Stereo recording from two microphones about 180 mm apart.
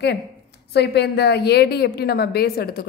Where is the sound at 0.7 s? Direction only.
65° left (ahead or behind).